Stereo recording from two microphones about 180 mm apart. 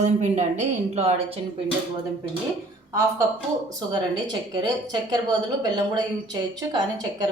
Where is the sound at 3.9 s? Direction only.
25° right (ahead or behind).